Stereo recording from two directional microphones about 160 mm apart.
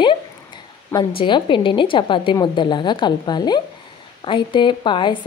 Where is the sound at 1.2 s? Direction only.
30° left (ahead or behind).